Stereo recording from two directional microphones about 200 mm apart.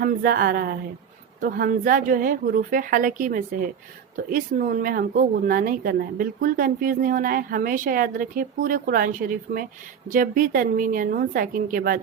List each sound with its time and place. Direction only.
0.0 s speech: 45° right (ahead or behind)